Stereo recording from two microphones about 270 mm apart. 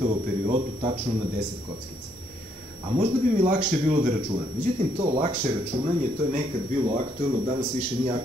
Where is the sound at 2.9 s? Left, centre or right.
Right.